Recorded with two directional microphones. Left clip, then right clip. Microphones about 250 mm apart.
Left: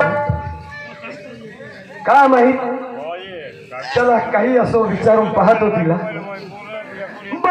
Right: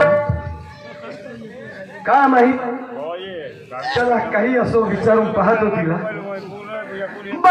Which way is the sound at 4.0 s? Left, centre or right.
Centre.